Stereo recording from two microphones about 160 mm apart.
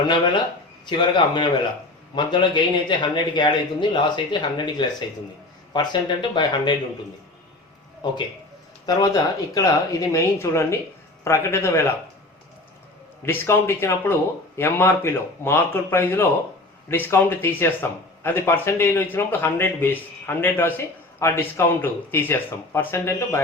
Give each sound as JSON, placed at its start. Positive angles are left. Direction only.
{"t": 0.9, "sound": "speech", "side_deg": 30}
{"t": 8.0, "sound": "speech", "side_deg": 25}
{"t": 13.2, "sound": "speech", "side_deg": 15}